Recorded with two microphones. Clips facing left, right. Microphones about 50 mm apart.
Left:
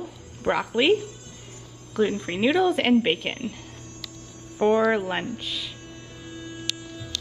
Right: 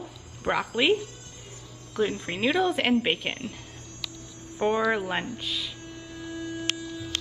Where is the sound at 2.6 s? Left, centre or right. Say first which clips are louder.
Left 4 dB; centre.